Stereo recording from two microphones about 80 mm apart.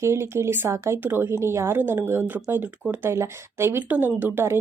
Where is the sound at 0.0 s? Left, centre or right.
Right.